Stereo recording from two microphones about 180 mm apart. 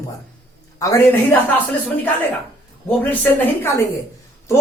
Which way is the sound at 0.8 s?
20° left (ahead or behind).